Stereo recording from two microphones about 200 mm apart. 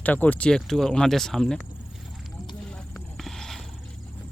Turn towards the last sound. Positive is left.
turn(degrees=0)  # may be behind; listen again after turning